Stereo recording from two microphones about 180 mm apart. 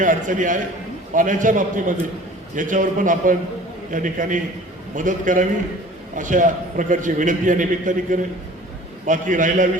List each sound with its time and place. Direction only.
0.0 s a man's voice: 45° right (ahead or behind)